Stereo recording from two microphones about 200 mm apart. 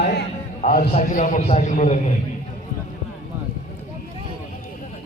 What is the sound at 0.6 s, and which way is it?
A man's voice, 50° left (ahead or behind).